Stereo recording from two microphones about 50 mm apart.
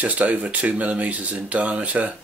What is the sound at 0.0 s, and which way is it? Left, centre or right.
Speech, right.